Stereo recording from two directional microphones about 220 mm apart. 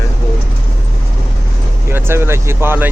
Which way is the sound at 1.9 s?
10° right (ahead or behind).